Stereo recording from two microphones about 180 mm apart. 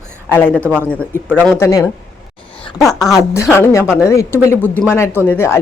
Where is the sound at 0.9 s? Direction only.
10° left (ahead or behind).